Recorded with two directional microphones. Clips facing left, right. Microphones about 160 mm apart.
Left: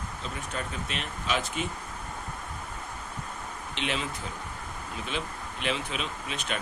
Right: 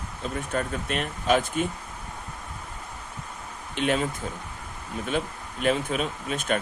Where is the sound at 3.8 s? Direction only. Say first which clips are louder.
Right 8 dB; 50° right (ahead or behind).